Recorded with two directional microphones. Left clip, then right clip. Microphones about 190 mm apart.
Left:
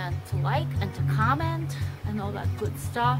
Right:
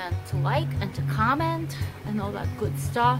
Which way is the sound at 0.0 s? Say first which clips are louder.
Right 2 dB; centre (ahead or behind).